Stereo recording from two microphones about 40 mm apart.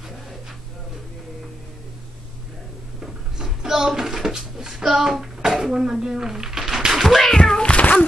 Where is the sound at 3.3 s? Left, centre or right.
Centre.